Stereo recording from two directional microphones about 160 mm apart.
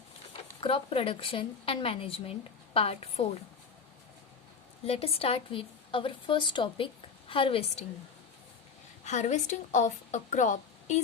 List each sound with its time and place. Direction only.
0.6 s a woman's voice: 35° left (ahead or behind)
4.9 s a woman's voice: 40° left (ahead or behind)
9.0 s a woman's voice: 45° left (ahead or behind)